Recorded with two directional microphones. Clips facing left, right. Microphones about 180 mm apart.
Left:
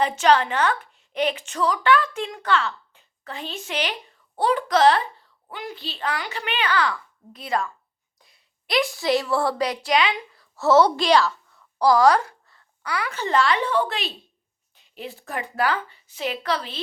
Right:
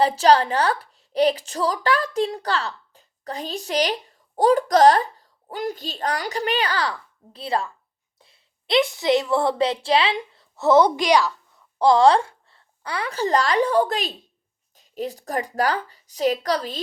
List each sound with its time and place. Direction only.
0.0 s a woman's voice: 35° right (ahead or behind); by 11.3 s 15° right (ahead or behind)
11.8 s a woman's voice: 25° right (ahead or behind)